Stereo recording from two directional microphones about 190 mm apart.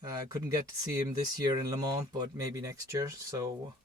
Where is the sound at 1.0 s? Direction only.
20° right (ahead or behind).